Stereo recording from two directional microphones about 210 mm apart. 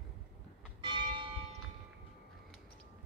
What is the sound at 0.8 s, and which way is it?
Church bell, 25° right (ahead or behind).